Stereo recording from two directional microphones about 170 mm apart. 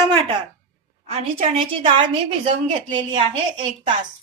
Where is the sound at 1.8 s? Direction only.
35° right (ahead or behind).